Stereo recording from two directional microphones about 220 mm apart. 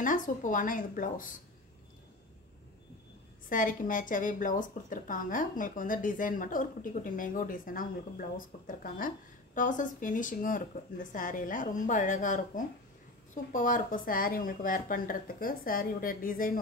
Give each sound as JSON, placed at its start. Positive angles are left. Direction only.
{"t": 0.0, "sound": "speech", "side_deg": 35}
{"t": 3.4, "sound": "speech", "side_deg": 40}